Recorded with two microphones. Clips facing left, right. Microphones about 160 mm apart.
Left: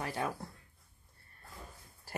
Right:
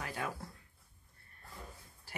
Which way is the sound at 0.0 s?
30° left (ahead or behind).